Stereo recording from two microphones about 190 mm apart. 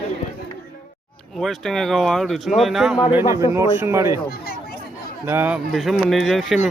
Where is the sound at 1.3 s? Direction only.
Centre (ahead or behind).